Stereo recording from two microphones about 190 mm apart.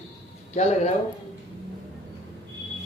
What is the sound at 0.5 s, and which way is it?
Speech, 35° left (ahead or behind).